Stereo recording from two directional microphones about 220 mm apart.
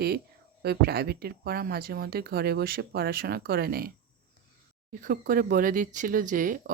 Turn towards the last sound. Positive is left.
turn(degrees=-40)  # may be behind; listen again after turning